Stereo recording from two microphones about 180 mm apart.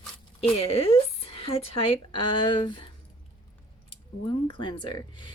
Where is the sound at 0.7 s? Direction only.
35° left (ahead or behind).